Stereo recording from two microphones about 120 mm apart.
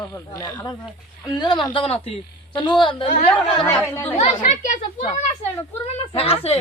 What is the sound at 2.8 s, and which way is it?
Speech, 45° left (ahead or behind).